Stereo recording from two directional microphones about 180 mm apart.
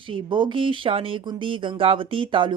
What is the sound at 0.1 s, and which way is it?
Speech, 25° right (ahead or behind).